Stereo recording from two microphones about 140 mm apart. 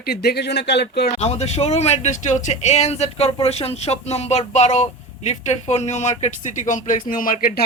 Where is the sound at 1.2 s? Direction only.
50° left (ahead or behind).